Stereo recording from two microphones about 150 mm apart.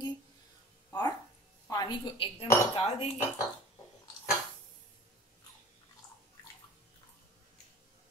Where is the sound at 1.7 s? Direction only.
30° left (ahead or behind).